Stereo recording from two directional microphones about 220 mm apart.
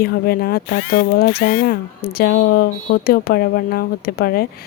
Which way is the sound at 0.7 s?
60° left (ahead or behind).